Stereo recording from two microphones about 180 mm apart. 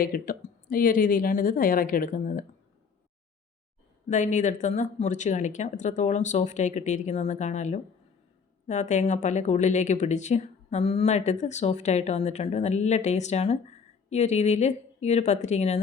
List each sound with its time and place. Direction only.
0.0 s a woman's voice: 50° left (ahead or behind)
4.1 s speech: 45° left (ahead or behind)